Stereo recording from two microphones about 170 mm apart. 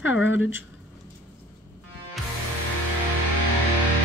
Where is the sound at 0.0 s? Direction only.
90° left.